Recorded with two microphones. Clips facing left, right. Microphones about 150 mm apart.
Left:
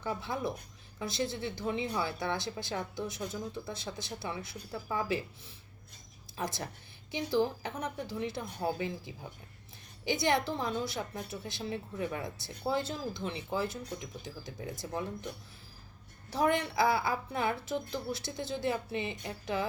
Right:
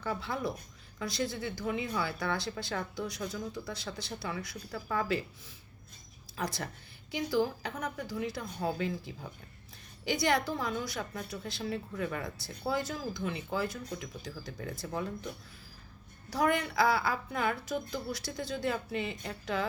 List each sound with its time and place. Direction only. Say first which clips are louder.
0.0 s a woman's voice: even; 20° left (ahead or behind)
6.3 s a woman's voice: right 1 dB; 20° left (ahead or behind)
16.3 s a woman's voice: even; 25° left (ahead or behind)